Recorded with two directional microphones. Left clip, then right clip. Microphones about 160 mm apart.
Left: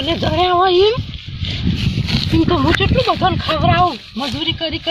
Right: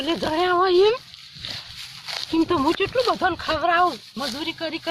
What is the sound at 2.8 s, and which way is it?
Speech, 20° right (ahead or behind).